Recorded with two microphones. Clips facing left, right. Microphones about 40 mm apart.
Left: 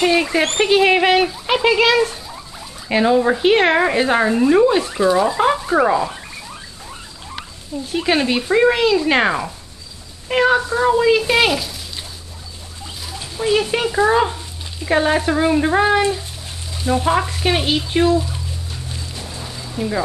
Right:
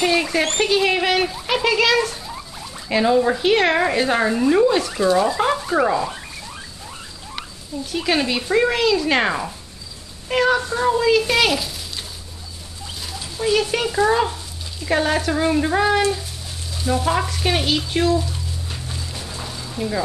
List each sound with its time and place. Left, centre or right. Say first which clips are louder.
0.0 s a sound: left 3 dB; centre
1.5 s speech: left 3 dB; centre
7.9 s a woman's voice: left 3 dB; centre
13.4 s speech: left 2 dB; centre
16.7 s frying: left 3 dB; centre
17.4 s speech: left 2 dB; centre
19.4 s a sound: left 2 dB; centre